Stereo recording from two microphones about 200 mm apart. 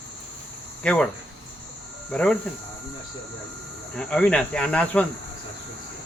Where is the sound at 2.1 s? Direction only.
5° left (ahead or behind).